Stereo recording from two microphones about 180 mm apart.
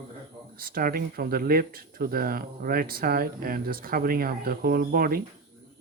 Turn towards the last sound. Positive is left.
turn(degrees=-55)  # may be behind; listen again after turning